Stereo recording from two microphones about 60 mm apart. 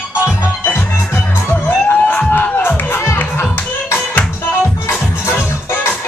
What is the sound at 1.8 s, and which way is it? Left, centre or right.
Crowd, left.